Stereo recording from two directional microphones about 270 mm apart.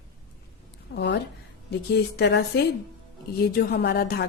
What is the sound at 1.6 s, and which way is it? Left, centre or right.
Speech, left.